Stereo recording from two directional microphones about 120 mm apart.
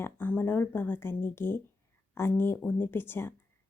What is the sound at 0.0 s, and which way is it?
Speech, 15° left (ahead or behind).